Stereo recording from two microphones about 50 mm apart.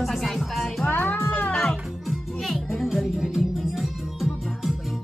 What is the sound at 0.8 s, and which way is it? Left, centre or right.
Music, left.